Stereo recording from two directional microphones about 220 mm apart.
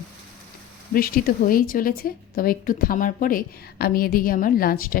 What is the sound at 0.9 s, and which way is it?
Speech, 40° left (ahead or behind).